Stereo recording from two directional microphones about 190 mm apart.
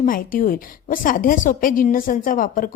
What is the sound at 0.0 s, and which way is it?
A woman's voice, 45° left (ahead or behind).